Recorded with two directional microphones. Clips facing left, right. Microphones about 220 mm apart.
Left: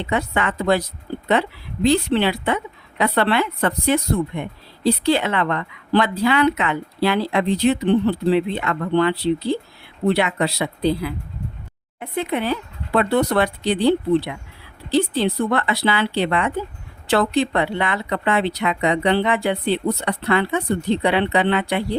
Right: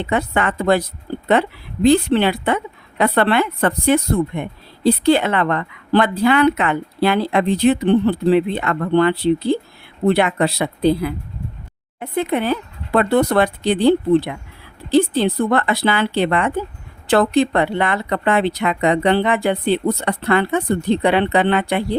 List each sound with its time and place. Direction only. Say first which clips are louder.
0.0 s a woman's voice: right 3 dB; 50° right (ahead or behind)